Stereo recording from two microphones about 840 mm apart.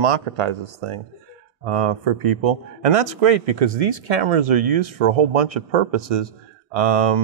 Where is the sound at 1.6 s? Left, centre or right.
Right.